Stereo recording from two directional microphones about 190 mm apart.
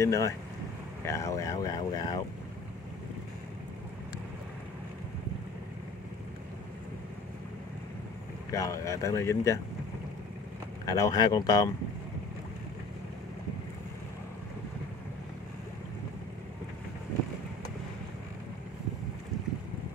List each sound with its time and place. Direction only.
0.0 s speech: 15° left (ahead or behind)
8.5 s speech: 15° left (ahead or behind)
10.9 s speech: 20° left (ahead or behind)